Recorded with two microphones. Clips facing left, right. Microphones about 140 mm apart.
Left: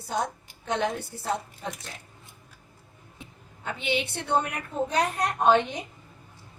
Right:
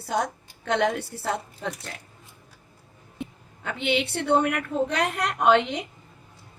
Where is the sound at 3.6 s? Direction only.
65° right (ahead or behind).